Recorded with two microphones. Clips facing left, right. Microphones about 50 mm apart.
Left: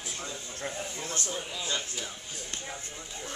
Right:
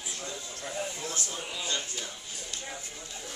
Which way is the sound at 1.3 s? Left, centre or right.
Centre.